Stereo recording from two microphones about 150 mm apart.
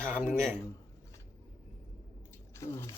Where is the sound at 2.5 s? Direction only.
20° left (ahead or behind).